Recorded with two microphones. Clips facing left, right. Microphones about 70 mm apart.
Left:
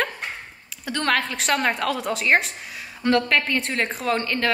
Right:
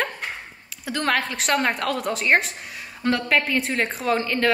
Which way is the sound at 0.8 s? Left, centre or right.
Centre.